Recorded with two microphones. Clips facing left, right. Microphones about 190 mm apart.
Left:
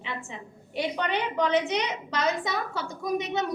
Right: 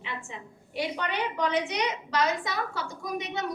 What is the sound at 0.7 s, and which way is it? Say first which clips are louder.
A woman's voice: left 2 dB; 20° left (ahead or behind).